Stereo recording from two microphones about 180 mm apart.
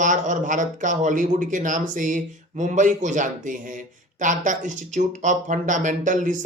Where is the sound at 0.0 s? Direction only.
45° right (ahead or behind).